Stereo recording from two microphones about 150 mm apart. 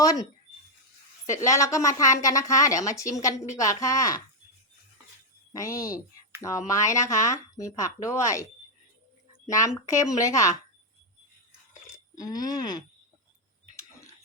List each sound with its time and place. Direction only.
0.0 s speech: 25° left (ahead or behind)
1.3 s speech: 20° left (ahead or behind)
5.5 s speech: 20° left (ahead or behind)
9.5 s speech: 20° left (ahead or behind)
12.1 s speech: 25° left (ahead or behind)